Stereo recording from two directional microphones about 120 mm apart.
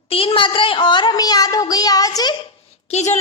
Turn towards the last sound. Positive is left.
turn(degrees=70)  # may be behind; listen again after turning